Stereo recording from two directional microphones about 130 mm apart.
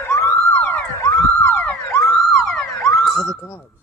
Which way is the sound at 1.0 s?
25° left (ahead or behind).